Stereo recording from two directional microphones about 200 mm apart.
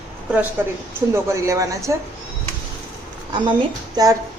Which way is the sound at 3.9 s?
20° right (ahead or behind).